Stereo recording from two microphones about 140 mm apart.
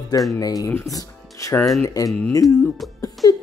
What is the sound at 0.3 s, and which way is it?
Speech, 25° left (ahead or behind).